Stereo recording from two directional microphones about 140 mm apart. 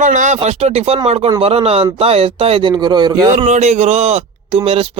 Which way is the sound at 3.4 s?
55° right (ahead or behind).